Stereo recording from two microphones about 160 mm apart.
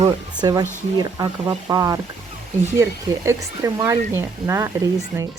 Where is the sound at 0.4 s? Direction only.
25° right (ahead or behind).